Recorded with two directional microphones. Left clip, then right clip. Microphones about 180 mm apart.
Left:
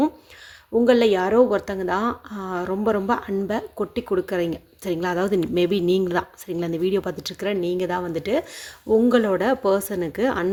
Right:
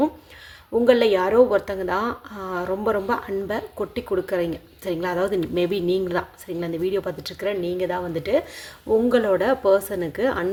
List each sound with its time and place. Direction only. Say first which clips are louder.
0.7 s a woman's voice: even; 25° left (ahead or behind)